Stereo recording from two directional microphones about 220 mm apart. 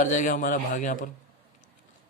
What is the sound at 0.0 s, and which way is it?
Speech, 35° left (ahead or behind).